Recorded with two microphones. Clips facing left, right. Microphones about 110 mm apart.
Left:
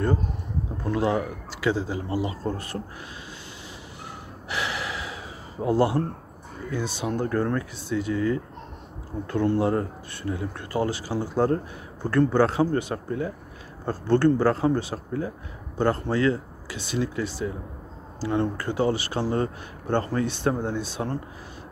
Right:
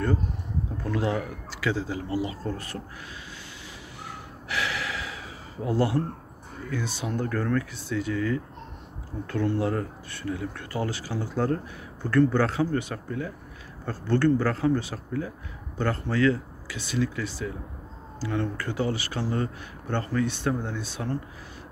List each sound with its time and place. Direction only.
0.9 s speech: 25° left (ahead or behind)
4.5 s gasp: 20° left (ahead or behind)
5.6 s speech: 25° left (ahead or behind)